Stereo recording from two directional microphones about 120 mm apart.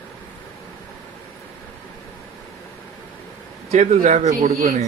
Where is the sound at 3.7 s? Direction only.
75° right (ahead or behind).